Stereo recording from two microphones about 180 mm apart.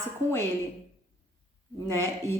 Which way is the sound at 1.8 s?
15° left (ahead or behind).